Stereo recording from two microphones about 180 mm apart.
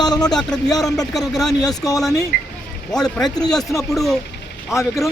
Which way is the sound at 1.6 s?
20° left (ahead or behind).